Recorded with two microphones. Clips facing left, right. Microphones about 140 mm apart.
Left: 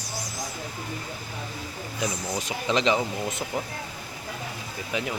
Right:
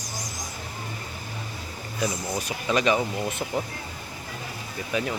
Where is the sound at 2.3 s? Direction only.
20° left (ahead or behind).